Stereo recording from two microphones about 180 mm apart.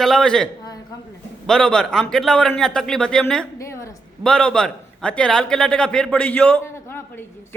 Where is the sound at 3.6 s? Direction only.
15° left (ahead or behind).